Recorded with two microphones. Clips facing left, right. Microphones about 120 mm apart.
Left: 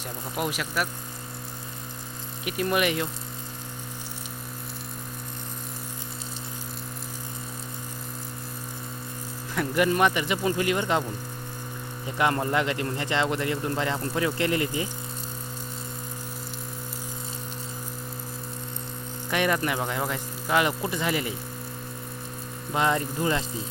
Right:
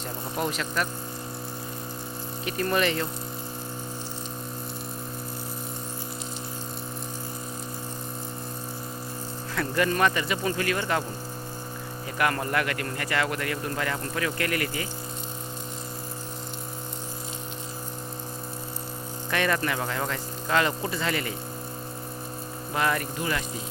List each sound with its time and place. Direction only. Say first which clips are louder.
0.3 s speech: even; 10° left (ahead or behind)
2.4 s speech: even; 10° left (ahead or behind)
9.6 s speech: left 2 dB; 15° left (ahead or behind)
12.1 s speech: left 2 dB; 20° left (ahead or behind)
19.3 s speech: left 1 dB; 15° left (ahead or behind)
22.7 s speech: left 2 dB; 20° left (ahead or behind)